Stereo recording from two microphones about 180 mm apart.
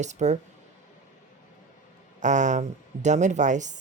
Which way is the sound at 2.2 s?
40° right (ahead or behind).